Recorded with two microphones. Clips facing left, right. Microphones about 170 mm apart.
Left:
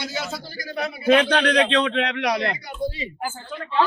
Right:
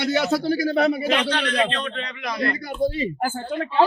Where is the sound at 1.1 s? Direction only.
60° left (ahead or behind).